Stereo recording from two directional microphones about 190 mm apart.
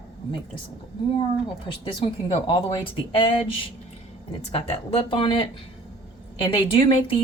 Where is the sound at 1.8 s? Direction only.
25° left (ahead or behind).